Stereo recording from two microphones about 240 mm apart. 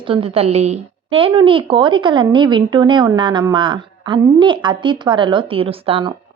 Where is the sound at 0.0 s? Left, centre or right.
Right.